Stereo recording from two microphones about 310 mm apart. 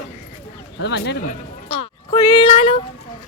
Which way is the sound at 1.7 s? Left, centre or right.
Centre.